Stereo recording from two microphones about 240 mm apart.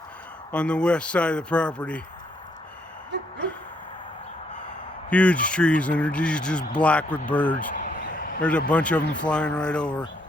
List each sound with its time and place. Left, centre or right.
0.5 s speech: centre
5.0 s speech: centre
7.7 s vehicle: left
8.7 s speech: centre